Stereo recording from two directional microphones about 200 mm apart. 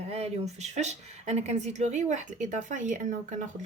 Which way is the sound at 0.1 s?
30° right (ahead or behind).